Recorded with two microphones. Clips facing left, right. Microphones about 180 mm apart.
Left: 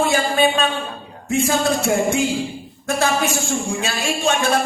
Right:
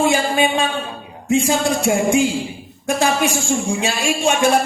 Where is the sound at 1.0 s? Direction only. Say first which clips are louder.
Right 4 dB; 15° right (ahead or behind).